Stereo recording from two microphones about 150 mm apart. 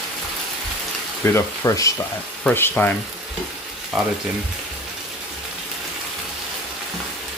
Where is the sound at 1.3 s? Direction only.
20° left (ahead or behind).